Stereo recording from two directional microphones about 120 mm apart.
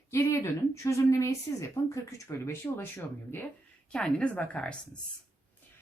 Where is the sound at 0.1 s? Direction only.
25° left (ahead or behind).